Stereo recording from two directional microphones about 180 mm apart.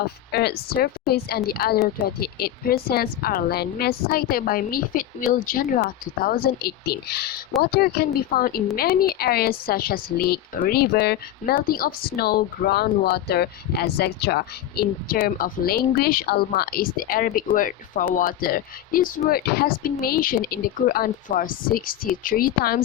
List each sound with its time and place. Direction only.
0.3 s a woman's voice: 65° left (ahead or behind)